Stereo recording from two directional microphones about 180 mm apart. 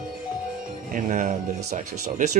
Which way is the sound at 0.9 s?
45° right (ahead or behind).